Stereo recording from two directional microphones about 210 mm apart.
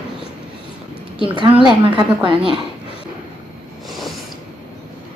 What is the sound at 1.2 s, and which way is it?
A woman's voice, 20° right (ahead or behind).